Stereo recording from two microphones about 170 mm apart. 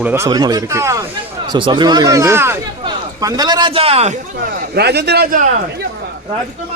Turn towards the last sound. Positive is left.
turn(degrees=-70)  # may be behind; listen again after turning